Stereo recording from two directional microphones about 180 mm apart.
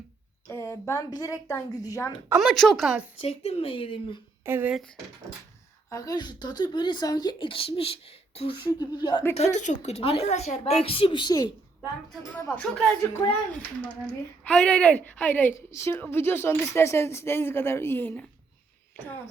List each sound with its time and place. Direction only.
0.4 s speech: 15° left (ahead or behind)
2.4 s a woman's voice: centre (ahead or behind)
3.2 s a woman's voice: 35° left (ahead or behind)
4.4 s speech: 10° right (ahead or behind)
5.9 s speech: 20° left (ahead or behind)
9.3 s a woman's voice: 40° left (ahead or behind); by 11.5 s 25° left (ahead or behind)
12.5 s a woman's voice: 5° left (ahead or behind)